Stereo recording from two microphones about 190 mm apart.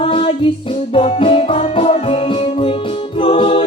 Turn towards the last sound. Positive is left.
turn(degrees=30)  # may be behind; listen again after turning